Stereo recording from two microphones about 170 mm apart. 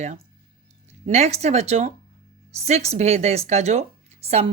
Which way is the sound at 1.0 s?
40° right (ahead or behind).